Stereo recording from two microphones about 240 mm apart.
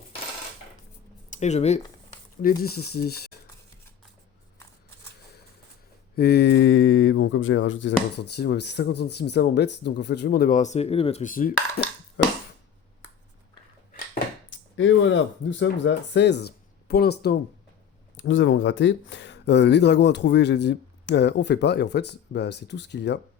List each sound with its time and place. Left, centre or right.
1.3 s speech: left
2.4 s speech: left
6.1 s speech: left
12.2 s a sound: left
14.5 s speech: left
18.2 s speech: left